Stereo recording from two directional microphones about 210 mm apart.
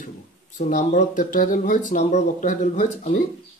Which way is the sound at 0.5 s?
35° left (ahead or behind).